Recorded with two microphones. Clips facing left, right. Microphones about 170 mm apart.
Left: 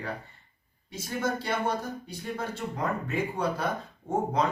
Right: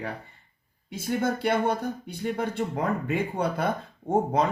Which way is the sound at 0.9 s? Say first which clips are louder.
Right 4 dB; 60° right (ahead or behind).